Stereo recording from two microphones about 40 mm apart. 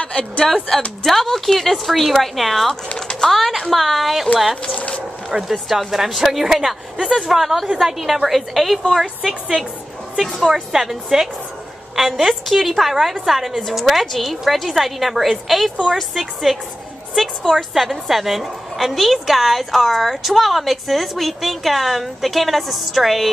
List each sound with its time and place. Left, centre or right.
0.0 s speech: left
1.0 s a woman's voice: centre
4.7 s a sound: left
5.5 s a woman's voice: centre
13.6 s a woman's voice: centre